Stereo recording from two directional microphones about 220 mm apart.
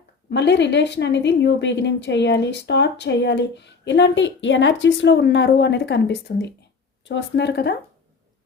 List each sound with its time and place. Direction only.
0.3 s speech: 50° left (ahead or behind)